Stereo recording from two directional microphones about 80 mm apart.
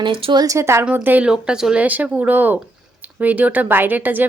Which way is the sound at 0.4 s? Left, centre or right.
Right.